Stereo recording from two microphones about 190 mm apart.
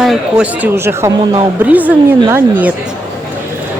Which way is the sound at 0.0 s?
5° right (ahead or behind).